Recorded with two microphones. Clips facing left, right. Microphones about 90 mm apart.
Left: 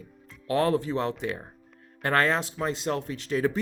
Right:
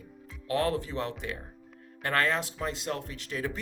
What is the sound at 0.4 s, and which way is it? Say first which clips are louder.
Speech: left 4 dB; 30° left (ahead or behind).